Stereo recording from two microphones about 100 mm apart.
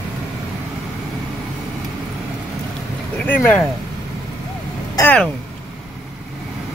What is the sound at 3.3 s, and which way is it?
Speech, 15° left (ahead or behind).